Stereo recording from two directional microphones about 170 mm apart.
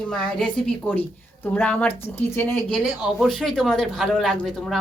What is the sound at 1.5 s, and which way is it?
Speech, 5° left (ahead or behind).